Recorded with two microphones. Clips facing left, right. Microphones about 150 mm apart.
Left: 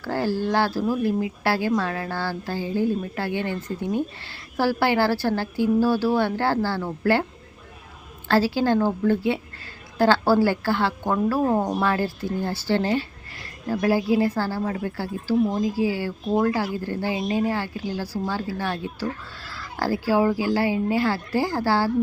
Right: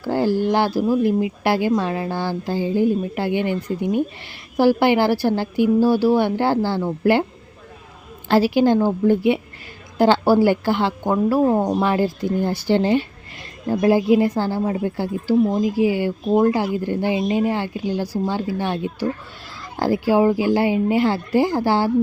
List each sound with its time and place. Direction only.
0.0 s speech: 15° right (ahead or behind)
8.3 s speech: 15° right (ahead or behind)